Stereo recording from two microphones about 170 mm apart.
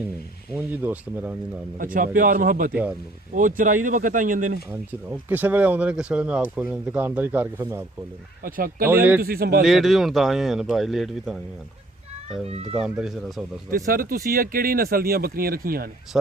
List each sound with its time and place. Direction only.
0.5 s speech: 10° right (ahead or behind)
1.8 s speech: 55° right (ahead or behind)
5.3 s speech: 10° right (ahead or behind)
8.4 s speech: 55° right (ahead or behind)
9.6 s speech: centre (ahead or behind)
12.7 s speech: 5° right (ahead or behind)
13.7 s speech: 60° right (ahead or behind)